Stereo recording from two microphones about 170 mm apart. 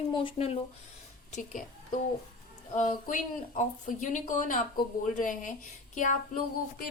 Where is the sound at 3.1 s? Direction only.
50° left (ahead or behind).